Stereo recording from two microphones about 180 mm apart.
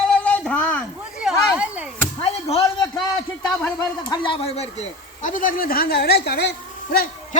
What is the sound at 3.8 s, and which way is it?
Speech, 25° left (ahead or behind).